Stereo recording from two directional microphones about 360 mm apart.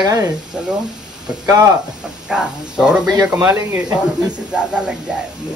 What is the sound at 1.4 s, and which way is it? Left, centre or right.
Speech, centre.